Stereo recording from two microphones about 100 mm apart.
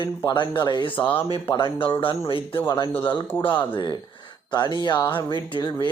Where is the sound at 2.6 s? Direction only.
45° left (ahead or behind).